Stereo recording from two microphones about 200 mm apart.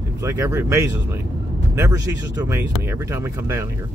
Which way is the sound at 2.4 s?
15° right (ahead or behind).